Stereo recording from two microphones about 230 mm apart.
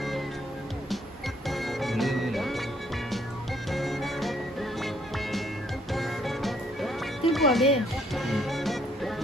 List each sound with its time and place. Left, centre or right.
1.5 s music: centre
3.7 s music: centre